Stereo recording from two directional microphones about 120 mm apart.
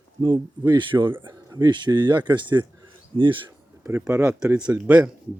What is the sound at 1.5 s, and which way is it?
Speech, 30° right (ahead or behind).